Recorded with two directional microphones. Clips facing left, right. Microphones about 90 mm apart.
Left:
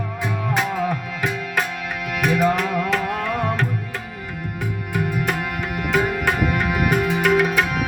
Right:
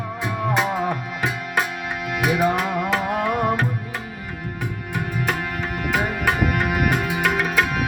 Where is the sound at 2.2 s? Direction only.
15° right (ahead or behind).